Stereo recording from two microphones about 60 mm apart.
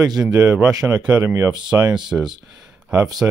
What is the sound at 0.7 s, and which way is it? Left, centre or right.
Speech, right.